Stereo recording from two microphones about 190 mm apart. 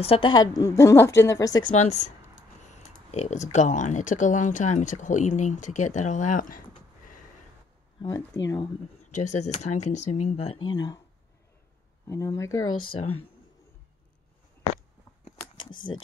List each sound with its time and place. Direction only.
0.0 s a woman's voice: 30° left (ahead or behind)
1.9 s speech: 35° left (ahead or behind)
8.3 s a woman's voice: 15° left (ahead or behind)
9.2 s speech: 40° left (ahead or behind); by 11.0 s 20° left (ahead or behind)
12.1 s a woman's voice: 15° left (ahead or behind)
12.7 s speech: 25° left (ahead or behind)
15.4 s a sound: 25° left (ahead or behind)